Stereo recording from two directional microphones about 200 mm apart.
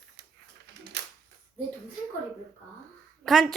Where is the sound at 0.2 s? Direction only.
60° right (ahead or behind).